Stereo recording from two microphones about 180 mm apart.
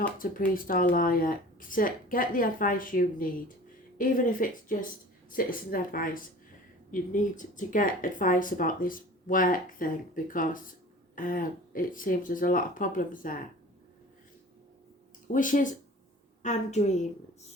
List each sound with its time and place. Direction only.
0.2 s speech: 50° left (ahead or behind)
15.3 s a woman's voice: 45° left (ahead or behind)